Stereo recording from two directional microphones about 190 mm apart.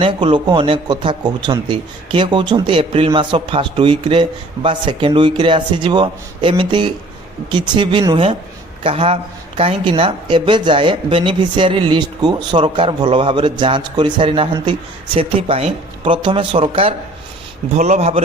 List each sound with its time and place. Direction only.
0.0 s a man's voice: 25° right (ahead or behind)